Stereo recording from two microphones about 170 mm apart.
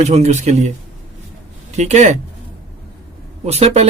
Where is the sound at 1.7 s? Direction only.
40° right (ahead or behind).